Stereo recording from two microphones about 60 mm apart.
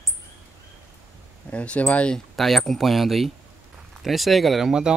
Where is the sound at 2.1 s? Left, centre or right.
Centre.